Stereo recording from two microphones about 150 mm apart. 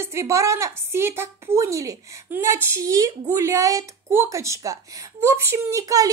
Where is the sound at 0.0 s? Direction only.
20° right (ahead or behind).